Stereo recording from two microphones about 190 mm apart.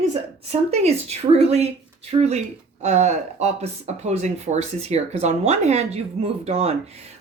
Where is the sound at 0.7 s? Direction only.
35° right (ahead or behind).